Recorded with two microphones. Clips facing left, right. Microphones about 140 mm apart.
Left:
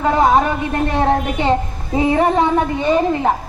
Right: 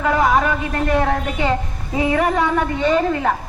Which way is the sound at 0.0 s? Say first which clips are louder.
Left 3 dB; 30° left (ahead or behind).